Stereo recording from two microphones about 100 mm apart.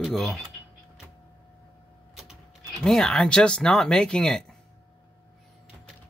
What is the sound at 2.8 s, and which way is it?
Speech, 5° left (ahead or behind).